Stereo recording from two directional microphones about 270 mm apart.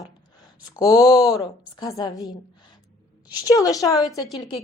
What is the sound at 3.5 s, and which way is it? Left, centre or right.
Speech, centre.